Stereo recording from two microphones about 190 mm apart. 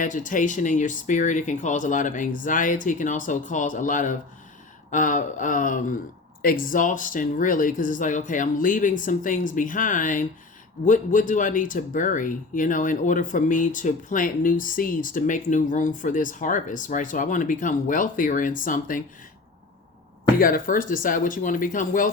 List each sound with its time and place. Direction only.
0.0 s speech: 45° left (ahead or behind)
20.4 s speech: 45° left (ahead or behind)